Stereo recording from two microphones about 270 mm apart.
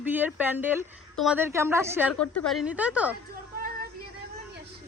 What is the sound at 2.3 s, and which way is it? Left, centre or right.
Speech, centre.